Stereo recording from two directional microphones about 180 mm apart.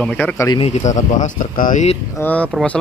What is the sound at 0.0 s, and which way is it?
Speech, 5° left (ahead or behind).